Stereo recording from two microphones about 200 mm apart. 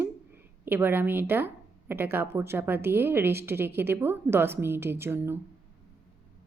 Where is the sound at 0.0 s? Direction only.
10° right (ahead or behind).